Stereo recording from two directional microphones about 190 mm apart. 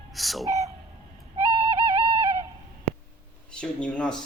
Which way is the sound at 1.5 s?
30° right (ahead or behind).